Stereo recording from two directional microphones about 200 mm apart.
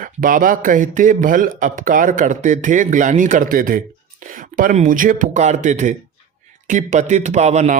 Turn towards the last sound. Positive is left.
turn(degrees=-35)  # may be behind; listen again after turning